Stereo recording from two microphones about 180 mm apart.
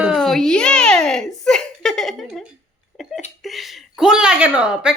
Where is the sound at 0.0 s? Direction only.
Centre (ahead or behind).